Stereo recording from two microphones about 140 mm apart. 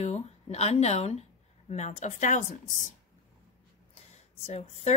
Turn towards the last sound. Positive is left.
turn(degrees=50)  # may be behind; listen again after turning